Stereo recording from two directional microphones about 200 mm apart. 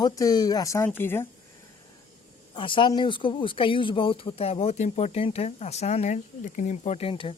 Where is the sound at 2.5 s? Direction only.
25° left (ahead or behind).